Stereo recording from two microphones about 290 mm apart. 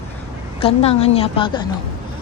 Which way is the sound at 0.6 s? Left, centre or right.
Centre.